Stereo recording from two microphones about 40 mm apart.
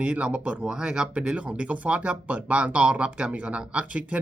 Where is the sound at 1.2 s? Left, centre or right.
Right.